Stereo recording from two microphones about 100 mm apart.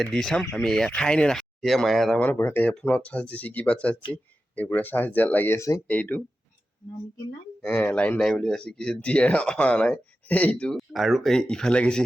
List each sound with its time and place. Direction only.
0.0 s speech: 5° left (ahead or behind)
2.1 s speech: 15° left (ahead or behind); by 5.8 s 30° left (ahead or behind)
5.9 s speech: 15° left (ahead or behind)
7.7 s speech: 15° left (ahead or behind)
8.2 s speech: centre (ahead or behind)
10.8 s speech: centre (ahead or behind)